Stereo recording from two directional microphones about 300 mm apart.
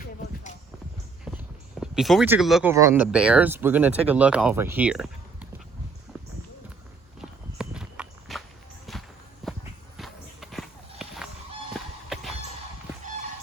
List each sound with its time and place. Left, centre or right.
1.2 s speech: centre
7.2 s walk: centre
12.0 s music: centre